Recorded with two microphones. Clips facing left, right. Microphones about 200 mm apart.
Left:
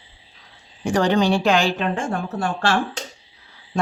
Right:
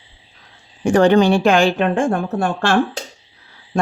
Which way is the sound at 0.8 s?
55° right (ahead or behind).